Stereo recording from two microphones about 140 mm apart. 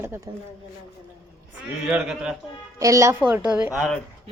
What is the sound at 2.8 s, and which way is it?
Speech, 20° right (ahead or behind).